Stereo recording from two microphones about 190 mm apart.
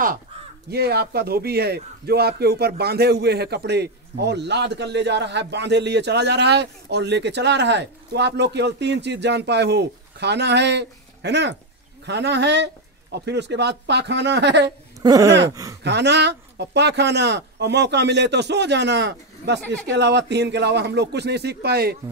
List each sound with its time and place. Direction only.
0.7 s speech: 55° right (ahead or behind)
15.0 s a sound: 20° right (ahead or behind)
15.8 s speech: 65° right (ahead or behind)